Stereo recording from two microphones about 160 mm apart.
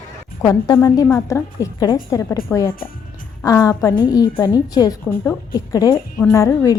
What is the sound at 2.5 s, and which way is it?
A woman's voice, 10° left (ahead or behind).